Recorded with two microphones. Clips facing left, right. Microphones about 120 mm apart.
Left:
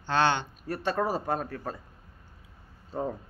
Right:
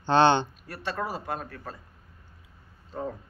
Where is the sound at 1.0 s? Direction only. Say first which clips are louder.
Left 4 dB; 40° left (ahead or behind).